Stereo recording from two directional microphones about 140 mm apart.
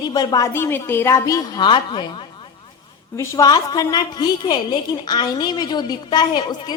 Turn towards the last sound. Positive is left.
turn(degrees=30)  # may be behind; listen again after turning